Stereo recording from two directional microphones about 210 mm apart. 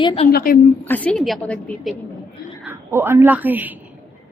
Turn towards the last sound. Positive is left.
turn(degrees=-10)  # may be behind; listen again after turning